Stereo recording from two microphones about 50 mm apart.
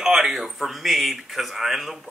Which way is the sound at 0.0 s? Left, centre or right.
Centre.